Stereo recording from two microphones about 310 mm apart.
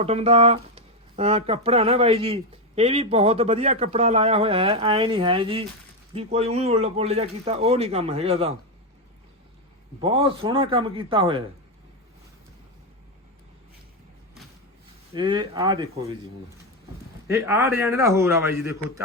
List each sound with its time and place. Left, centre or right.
0.0 s speech: centre
10.0 s a man's voice: centre
15.1 s a man's voice: centre
17.2 s a man's voice: centre